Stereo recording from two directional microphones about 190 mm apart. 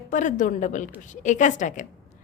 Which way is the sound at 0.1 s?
40° left (ahead or behind).